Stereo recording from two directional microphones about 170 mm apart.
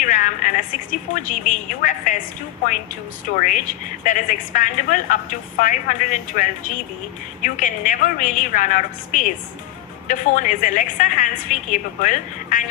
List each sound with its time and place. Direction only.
0.0 s a woman's voice: 50° left (ahead or behind)